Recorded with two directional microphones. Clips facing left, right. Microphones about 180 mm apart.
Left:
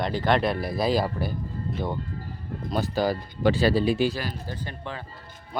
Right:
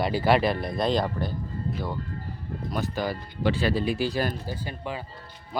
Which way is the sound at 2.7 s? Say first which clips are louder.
Left 4 dB; 30° left (ahead or behind).